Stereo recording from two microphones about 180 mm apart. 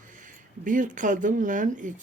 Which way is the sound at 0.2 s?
45° right (ahead or behind).